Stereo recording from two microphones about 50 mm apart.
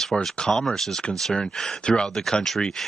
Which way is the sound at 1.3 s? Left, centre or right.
Centre.